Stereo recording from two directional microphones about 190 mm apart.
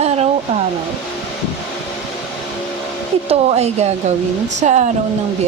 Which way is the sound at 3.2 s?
35° right (ahead or behind).